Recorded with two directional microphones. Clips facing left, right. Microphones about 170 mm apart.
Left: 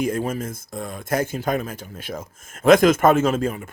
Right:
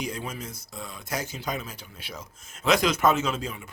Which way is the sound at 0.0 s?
50° left (ahead or behind).